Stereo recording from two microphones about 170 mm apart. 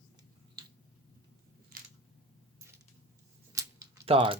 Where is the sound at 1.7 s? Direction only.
55° right (ahead or behind).